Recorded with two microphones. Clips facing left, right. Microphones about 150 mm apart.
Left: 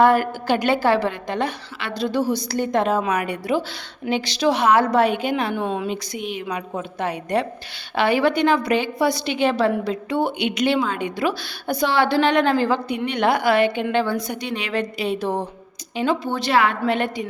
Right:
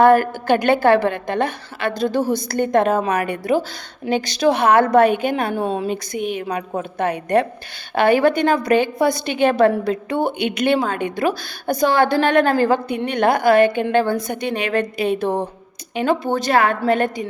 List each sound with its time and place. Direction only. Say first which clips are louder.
0.0 s a woman's voice: right 3 dB; 50° right (ahead or behind)